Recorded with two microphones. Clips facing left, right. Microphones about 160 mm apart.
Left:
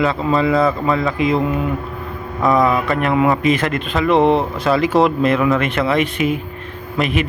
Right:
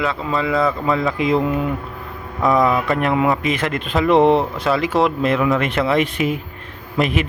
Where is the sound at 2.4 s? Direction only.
Centre (ahead or behind).